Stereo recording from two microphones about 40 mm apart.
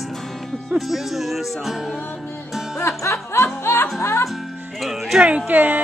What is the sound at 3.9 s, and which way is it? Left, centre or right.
Music, left.